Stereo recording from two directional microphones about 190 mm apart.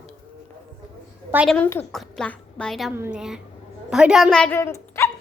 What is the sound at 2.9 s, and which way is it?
Child singing, 10° right (ahead or behind).